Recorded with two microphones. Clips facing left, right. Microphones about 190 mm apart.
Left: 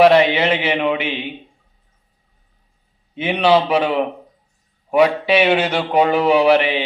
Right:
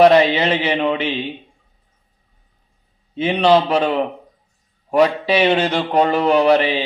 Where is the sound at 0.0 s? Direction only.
10° left (ahead or behind).